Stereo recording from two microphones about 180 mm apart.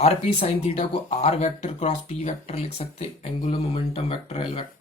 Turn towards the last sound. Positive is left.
turn(degrees=30)  # may be behind; listen again after turning